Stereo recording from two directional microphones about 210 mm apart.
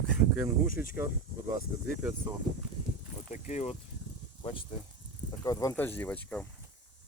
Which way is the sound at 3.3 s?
35° left (ahead or behind).